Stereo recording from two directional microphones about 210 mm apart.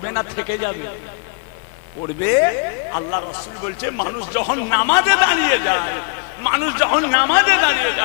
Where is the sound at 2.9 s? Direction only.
20° left (ahead or behind).